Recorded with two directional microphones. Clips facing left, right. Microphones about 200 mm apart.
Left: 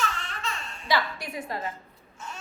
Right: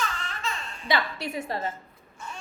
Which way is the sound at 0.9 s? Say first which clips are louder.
Even; 25° right (ahead or behind).